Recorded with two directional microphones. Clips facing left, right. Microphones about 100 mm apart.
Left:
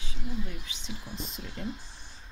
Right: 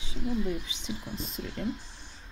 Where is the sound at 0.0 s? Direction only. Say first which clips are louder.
Right 6 dB; 20° right (ahead or behind).